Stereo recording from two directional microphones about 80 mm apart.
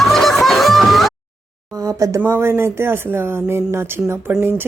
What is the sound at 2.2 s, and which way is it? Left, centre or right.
Speech, right.